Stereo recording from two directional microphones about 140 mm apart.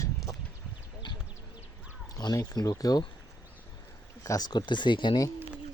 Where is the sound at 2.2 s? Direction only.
30° left (ahead or behind).